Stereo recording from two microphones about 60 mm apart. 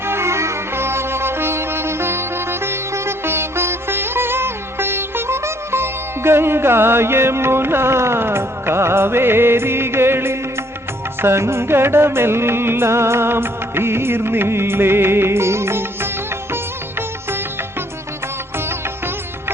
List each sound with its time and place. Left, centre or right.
0.0 s music: right
17.2 s music: right